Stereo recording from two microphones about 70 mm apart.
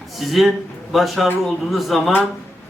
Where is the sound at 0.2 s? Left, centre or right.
Centre.